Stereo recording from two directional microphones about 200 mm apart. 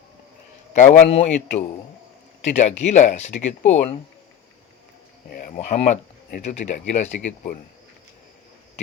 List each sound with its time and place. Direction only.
0.8 s speech: 35° left (ahead or behind)
5.3 s speech: 40° left (ahead or behind)